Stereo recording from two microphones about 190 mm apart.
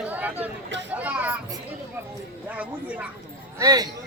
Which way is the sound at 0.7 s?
70° right (ahead or behind).